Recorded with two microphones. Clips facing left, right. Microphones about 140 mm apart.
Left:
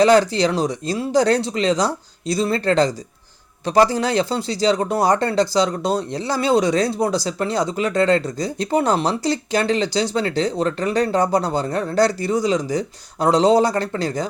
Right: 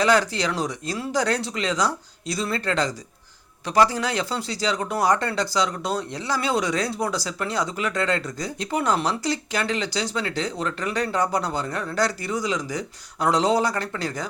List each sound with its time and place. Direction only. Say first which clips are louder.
0.0 s speech: left 7 dB; 30° left (ahead or behind)